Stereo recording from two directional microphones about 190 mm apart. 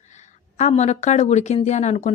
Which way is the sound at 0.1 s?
40° left (ahead or behind).